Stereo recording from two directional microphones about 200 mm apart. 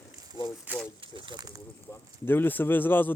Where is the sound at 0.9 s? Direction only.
25° right (ahead or behind).